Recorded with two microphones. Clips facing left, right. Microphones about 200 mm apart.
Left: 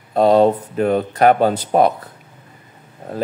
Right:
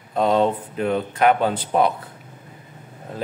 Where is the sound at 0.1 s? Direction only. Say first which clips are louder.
Left 6 dB; 35° left (ahead or behind).